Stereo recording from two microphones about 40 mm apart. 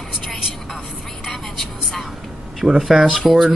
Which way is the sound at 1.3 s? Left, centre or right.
Centre.